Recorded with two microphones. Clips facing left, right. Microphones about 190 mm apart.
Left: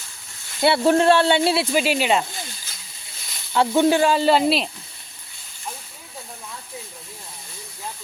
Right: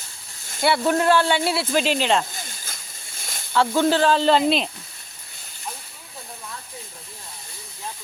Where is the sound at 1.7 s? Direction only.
10° left (ahead or behind).